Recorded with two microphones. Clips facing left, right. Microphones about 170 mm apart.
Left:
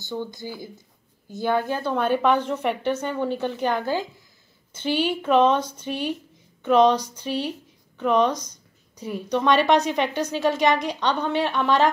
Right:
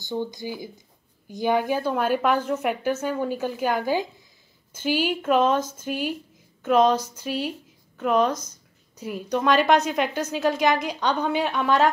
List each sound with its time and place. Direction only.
0.0 s a woman's voice: 20° right (ahead or behind)